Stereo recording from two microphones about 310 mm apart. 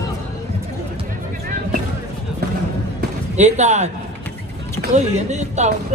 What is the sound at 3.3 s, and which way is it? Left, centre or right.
Speech, right.